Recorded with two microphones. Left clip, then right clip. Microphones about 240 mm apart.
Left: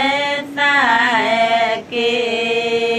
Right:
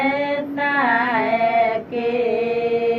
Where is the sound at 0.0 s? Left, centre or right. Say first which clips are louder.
Left 3 dB; left.